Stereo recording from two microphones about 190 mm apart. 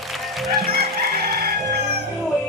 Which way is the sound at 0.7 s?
55° right (ahead or behind).